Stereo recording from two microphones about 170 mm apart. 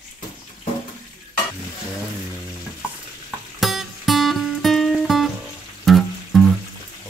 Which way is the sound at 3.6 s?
Centre (ahead or behind).